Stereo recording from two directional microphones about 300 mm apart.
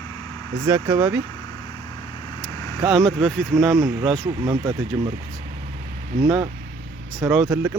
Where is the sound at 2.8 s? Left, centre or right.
Centre.